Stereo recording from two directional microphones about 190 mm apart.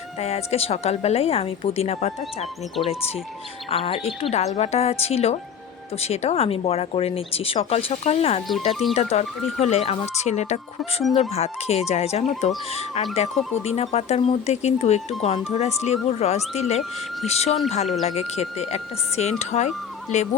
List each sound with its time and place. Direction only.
0.2 s speech: 35° left (ahead or behind)
3.7 s speech: 30° left (ahead or behind)
8.7 s speech: centre (ahead or behind)
9.0 s speech: 35° left (ahead or behind)